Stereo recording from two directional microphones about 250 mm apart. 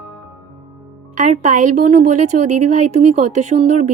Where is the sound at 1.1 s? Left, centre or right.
Right.